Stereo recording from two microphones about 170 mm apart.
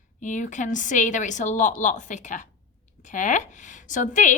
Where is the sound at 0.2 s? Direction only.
45° left (ahead or behind).